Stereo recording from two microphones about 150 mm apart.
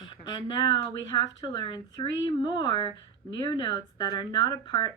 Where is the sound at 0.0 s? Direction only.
30° left (ahead or behind).